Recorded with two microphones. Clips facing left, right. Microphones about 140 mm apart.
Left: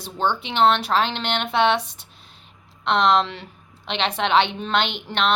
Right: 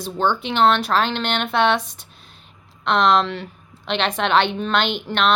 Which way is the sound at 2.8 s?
20° left (ahead or behind).